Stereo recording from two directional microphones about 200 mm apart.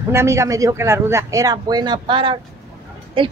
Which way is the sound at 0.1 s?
15° right (ahead or behind).